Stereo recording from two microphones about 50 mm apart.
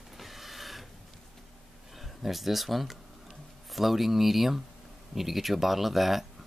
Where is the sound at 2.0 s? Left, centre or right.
Centre.